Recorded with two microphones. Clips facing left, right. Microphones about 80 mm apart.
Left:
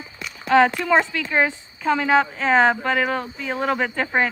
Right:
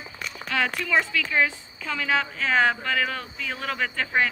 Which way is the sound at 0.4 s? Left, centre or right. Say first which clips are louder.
Left 11 dB; left.